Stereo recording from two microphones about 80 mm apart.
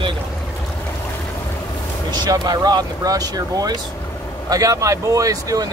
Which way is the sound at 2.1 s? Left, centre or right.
Right.